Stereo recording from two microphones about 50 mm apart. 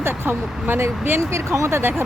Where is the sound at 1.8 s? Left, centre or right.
Right.